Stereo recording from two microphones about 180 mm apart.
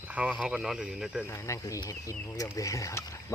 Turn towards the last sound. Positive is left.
turn(degrees=20)  # may be behind; listen again after turning